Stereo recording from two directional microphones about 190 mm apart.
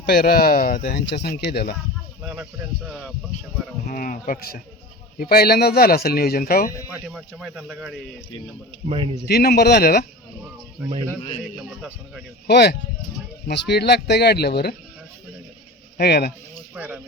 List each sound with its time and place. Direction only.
0.0 s speech: 50° left (ahead or behind)
2.2 s speech: 10° right (ahead or behind)
3.8 s speech: 45° left (ahead or behind)
6.9 s speech: 5° right (ahead or behind)
8.9 s a man's voice: 30° right (ahead or behind)
9.2 s speech: 55° left (ahead or behind)
12.5 s speech: 60° left (ahead or behind)
16.0 s speech: 60° left (ahead or behind)
16.7 s speech: 5° right (ahead or behind)